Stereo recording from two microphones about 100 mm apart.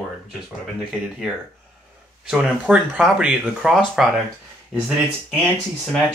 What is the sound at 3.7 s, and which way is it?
Speech, centre (ahead or behind).